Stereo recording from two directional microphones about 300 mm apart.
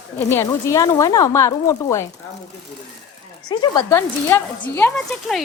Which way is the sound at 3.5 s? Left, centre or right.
Centre.